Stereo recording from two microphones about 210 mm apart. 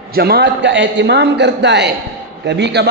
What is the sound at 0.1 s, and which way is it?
A man's voice, 50° right (ahead or behind).